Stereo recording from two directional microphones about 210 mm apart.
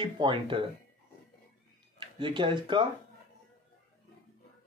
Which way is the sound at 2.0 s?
25° right (ahead or behind).